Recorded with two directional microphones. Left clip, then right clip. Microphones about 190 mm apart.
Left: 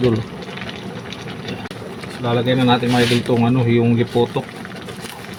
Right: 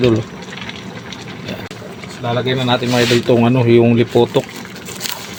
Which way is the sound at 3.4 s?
55° right (ahead or behind).